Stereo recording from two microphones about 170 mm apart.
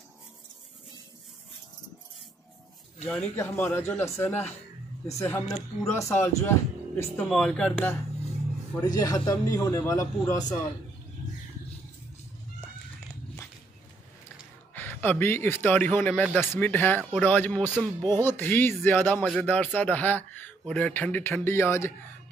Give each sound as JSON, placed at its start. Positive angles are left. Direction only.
{"t": 3.0, "sound": "speech", "side_deg": 10}
{"t": 7.2, "sound": "a man's voice", "side_deg": 0}
{"t": 14.7, "sound": "speech", "side_deg": 10}